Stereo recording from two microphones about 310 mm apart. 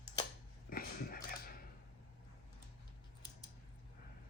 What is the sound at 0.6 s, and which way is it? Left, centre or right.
Dog, left.